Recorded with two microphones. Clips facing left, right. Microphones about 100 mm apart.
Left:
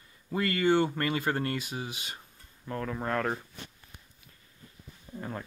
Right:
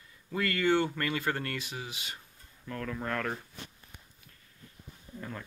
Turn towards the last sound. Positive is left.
turn(degrees=30)  # may be behind; listen again after turning